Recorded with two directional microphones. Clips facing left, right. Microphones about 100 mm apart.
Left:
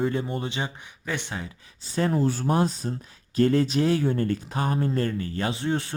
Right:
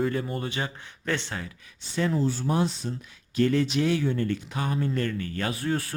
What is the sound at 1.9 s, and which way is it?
Speech, 45° left (ahead or behind).